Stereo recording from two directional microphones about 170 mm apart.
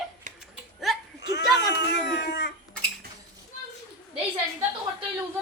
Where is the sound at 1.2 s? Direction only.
85° left.